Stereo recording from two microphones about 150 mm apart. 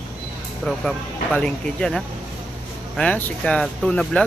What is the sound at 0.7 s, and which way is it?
Speech, 5° left (ahead or behind).